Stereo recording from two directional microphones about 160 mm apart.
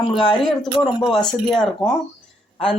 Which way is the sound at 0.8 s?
25° left (ahead or behind).